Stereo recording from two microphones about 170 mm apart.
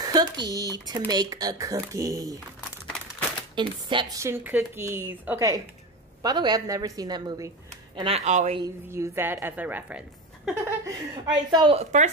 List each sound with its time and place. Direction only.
0.0 s speech: 25° right (ahead or behind)
3.5 s speech: 25° right (ahead or behind); by 8.5 s 40° right (ahead or behind)
8.9 s speech: 15° right (ahead or behind)
10.9 s a woman's voice: 25° right (ahead or behind); by 12.1 s 40° right (ahead or behind)